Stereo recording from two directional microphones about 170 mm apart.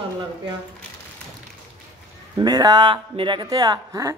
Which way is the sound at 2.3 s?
25° right (ahead or behind).